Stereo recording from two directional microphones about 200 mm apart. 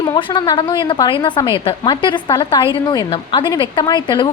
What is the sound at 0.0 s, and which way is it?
A woman's voice, 20° left (ahead or behind).